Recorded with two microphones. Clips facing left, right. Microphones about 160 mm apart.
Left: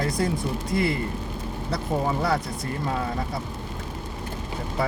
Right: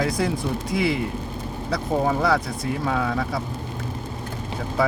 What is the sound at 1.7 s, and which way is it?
Speech, 90° right.